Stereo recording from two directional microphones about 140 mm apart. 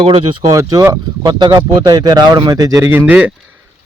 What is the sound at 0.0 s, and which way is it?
Speech, 35° right (ahead or behind).